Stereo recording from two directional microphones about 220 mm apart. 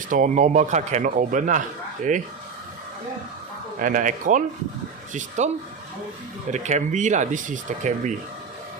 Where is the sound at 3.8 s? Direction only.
35° right (ahead or behind).